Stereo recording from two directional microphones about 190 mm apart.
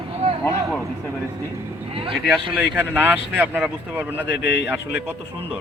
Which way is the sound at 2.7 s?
10° right (ahead or behind).